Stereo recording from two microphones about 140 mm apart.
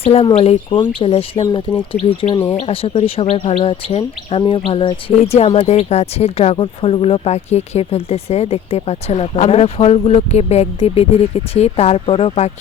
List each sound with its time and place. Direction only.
0.0 s speech: 45° left (ahead or behind)